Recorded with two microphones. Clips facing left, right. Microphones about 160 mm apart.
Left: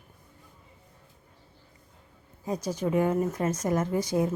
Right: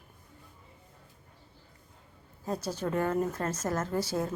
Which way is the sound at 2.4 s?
10° left (ahead or behind).